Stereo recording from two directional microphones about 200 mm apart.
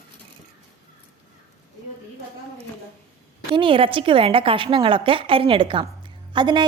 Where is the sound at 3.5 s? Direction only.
25° right (ahead or behind).